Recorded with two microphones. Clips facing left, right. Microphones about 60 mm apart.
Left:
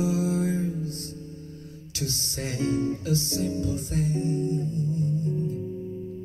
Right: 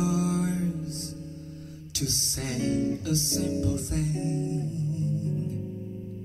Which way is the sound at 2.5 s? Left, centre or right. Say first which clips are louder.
Left 1 dB; left.